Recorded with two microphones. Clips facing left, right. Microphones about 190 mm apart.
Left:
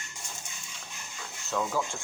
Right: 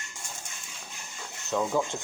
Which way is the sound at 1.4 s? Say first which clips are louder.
Right 3 dB; 20° right (ahead or behind).